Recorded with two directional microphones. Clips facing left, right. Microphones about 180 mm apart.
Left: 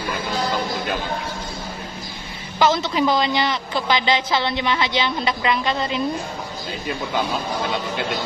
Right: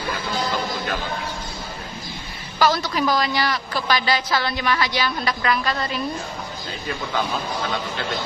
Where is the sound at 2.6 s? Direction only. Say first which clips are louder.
Left 2 dB; 20° left (ahead or behind).